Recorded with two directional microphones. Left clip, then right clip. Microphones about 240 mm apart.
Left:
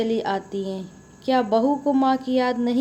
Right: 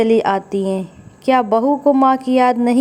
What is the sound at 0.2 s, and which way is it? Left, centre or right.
Speech, right.